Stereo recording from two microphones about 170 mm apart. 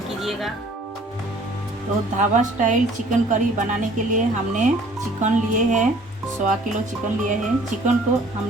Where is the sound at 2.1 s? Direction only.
45° right (ahead or behind).